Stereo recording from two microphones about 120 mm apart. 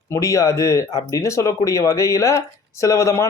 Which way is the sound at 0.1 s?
25° left (ahead or behind).